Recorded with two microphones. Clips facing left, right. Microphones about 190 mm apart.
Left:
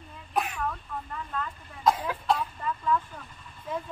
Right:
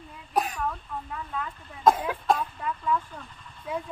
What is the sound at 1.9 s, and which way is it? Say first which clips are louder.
Cough: right 3 dB; 50° right (ahead or behind).